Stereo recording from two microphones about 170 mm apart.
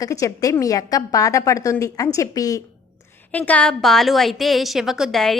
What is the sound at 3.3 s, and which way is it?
A woman's voice, 10° left (ahead or behind).